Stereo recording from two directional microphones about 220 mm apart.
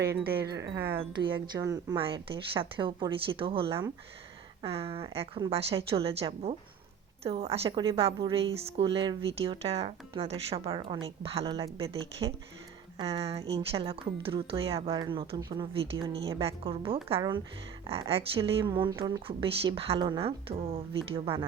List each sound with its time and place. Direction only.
0.0 s speech: 10° right (ahead or behind)
0.3 s speech: 45° right (ahead or behind)
0.9 s a woman's voice: 20° right (ahead or behind)